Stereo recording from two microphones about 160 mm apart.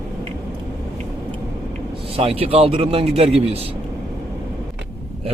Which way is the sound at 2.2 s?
35° right (ahead or behind).